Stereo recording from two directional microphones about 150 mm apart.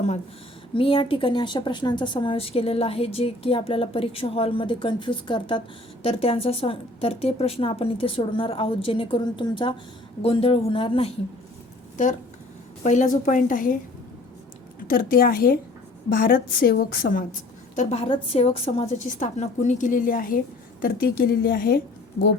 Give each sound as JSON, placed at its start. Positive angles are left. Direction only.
{"t": 0.7, "sound": "a woman's voice", "side_deg": 35}
{"t": 12.8, "sound": "a woman's voice", "side_deg": 50}
{"t": 14.8, "sound": "a woman's voice", "side_deg": 70}
{"t": 17.7, "sound": "a woman's voice", "side_deg": 40}
{"t": 20.8, "sound": "a woman's voice", "side_deg": 80}